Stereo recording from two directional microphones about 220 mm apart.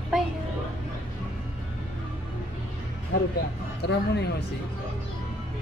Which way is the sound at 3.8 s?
50° left (ahead or behind).